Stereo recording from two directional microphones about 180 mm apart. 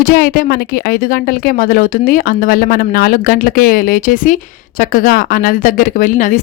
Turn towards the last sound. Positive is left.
turn(degrees=45)  # may be behind; listen again after turning